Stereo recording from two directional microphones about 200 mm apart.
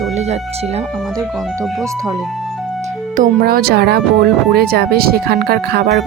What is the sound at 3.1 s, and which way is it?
Speech, 45° right (ahead or behind).